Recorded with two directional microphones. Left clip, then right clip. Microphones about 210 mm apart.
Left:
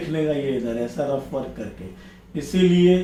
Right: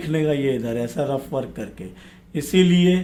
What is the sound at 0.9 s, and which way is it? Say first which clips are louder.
Speech: right 1 dB; 40° right (ahead or behind).